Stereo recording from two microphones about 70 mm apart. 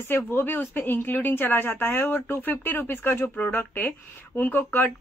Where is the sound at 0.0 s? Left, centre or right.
Left.